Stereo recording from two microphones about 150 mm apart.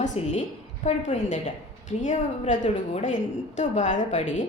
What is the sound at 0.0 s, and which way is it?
A woman's voice, 50° left (ahead or behind).